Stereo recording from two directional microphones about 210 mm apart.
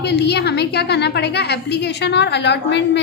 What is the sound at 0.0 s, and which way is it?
A woman's voice, 50° left (ahead or behind).